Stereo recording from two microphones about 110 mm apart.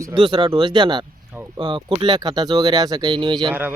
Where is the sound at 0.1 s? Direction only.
50° right (ahead or behind).